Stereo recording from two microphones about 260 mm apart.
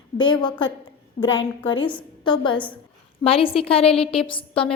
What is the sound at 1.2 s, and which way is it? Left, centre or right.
A woman's voice, left.